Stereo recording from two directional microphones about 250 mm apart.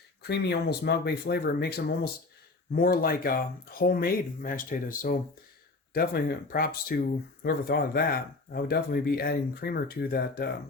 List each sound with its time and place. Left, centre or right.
0.2 s speech: left